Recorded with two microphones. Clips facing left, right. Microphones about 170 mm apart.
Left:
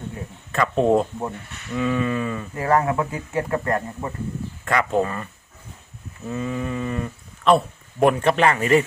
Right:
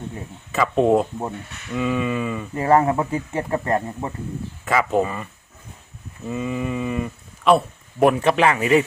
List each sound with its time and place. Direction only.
0.5 s speech: 5° right (ahead or behind)
2.6 s speech: 25° right (ahead or behind)
4.6 s speech: 5° right (ahead or behind)